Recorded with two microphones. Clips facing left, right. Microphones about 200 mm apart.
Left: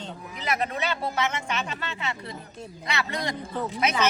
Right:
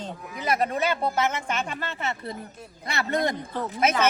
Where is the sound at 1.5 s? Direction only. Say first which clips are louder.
Right 2 dB; 50° right (ahead or behind).